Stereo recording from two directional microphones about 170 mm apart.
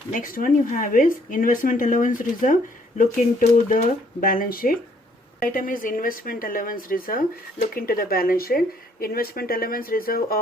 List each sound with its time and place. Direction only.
0.1 s speech: 50° left (ahead or behind)
3.7 s speech: 50° left (ahead or behind)